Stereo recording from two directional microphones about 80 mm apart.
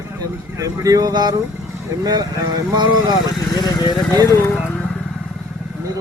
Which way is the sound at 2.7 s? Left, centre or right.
Right.